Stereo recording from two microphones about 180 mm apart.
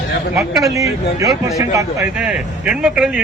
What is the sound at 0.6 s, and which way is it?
Speech, 15° right (ahead or behind).